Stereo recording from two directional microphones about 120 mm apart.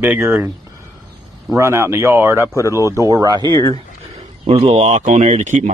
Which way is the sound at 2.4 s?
25° left (ahead or behind).